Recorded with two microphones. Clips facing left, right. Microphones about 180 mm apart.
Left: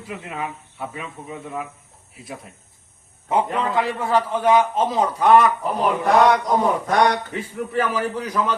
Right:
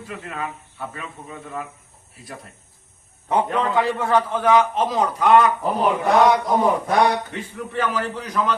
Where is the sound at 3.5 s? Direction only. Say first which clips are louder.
Right 2 dB; centre (ahead or behind).